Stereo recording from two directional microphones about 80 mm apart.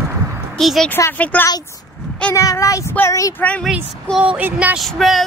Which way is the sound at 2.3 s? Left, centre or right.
Left.